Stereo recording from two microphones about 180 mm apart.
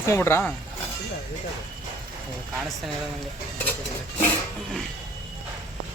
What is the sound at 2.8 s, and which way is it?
Speech, centre (ahead or behind).